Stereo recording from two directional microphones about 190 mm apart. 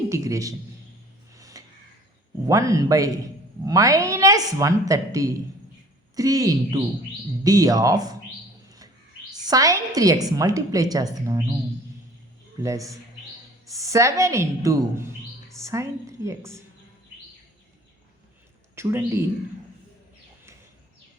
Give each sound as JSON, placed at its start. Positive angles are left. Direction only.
{"t": 0.1, "sound": "a woman's voice", "side_deg": -15}
{"t": 1.3, "sound": "music", "side_deg": -15}
{"t": 2.5, "sound": "a woman's voice", "side_deg": -15}
{"t": 9.5, "sound": "a woman's voice", "side_deg": -20}
{"t": 12.6, "sound": "a woman's voice", "side_deg": -15}
{"t": 18.8, "sound": "a woman's voice", "side_deg": -15}